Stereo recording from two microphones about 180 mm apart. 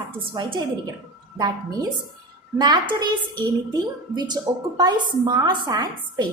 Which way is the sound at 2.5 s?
25° right (ahead or behind).